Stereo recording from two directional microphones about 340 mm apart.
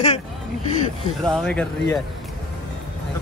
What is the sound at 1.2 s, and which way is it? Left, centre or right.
Speech, centre.